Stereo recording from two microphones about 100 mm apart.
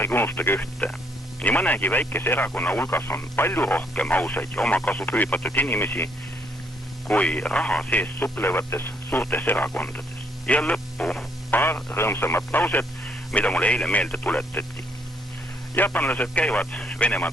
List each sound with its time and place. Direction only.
0.0 s speech: 20° left (ahead or behind)
7.1 s speech: 15° left (ahead or behind)
10.4 s a sound: 10° left (ahead or behind)
11.6 s speech: 20° left (ahead or behind)
15.7 s speech: 20° left (ahead or behind)